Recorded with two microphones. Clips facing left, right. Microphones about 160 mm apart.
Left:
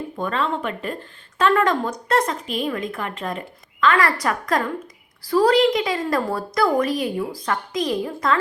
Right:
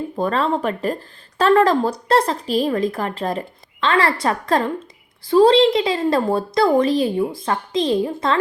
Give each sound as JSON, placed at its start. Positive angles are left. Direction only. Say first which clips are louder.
{"t": 0.2, "sound": "a woman's voice", "louder": "right 4 dB", "side_deg": -35}